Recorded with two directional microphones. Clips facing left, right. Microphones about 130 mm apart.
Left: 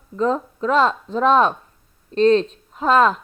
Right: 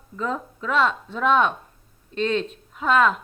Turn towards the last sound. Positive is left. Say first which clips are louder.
# left 4 dB
turn(degrees=35)  # may be behind; listen again after turning